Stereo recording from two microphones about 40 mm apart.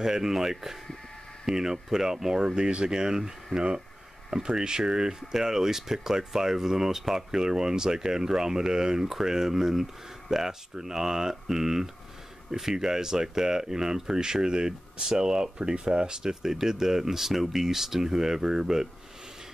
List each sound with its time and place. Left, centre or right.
0.0 s speech: centre